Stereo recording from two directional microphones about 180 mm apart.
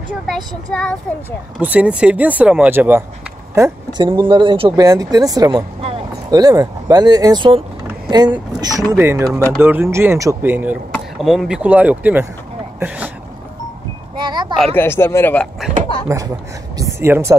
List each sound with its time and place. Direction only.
0.7 s speech: 5° left (ahead or behind)
1.6 s speech: 10° right (ahead or behind)
4.1 s speech: 30° right (ahead or behind); by 13.1 s 10° right (ahead or behind)
14.1 s a sound: 25° right (ahead or behind)
14.8 s speech: 15° left (ahead or behind)
16.1 s speech: 15° right (ahead or behind)
16.7 s a sound: 15° right (ahead or behind)